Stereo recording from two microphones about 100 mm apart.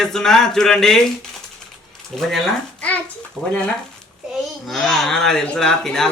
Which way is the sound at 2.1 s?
5° left (ahead or behind).